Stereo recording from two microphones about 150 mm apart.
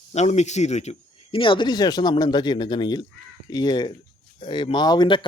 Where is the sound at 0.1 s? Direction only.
50° left (ahead or behind).